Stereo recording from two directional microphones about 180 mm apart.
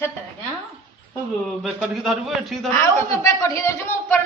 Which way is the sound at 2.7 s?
15° left (ahead or behind).